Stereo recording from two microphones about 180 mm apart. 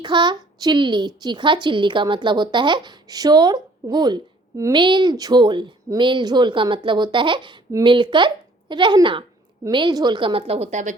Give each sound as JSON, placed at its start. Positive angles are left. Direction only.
{"t": 0.0, "sound": "a woman's voice", "side_deg": -25}